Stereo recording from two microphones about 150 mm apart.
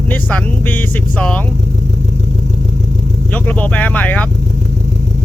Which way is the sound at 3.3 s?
10° left (ahead or behind).